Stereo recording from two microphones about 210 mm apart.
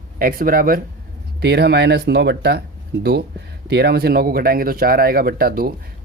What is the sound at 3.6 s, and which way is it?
Speech, 50° right (ahead or behind).